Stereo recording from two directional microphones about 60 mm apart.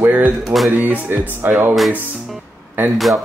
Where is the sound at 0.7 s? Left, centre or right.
Right.